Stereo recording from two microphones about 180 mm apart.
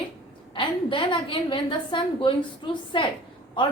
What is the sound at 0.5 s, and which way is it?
A woman's voice, 30° left (ahead or behind).